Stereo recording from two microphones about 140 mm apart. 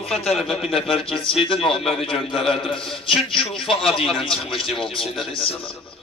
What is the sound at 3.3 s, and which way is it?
Speech, 40° left (ahead or behind).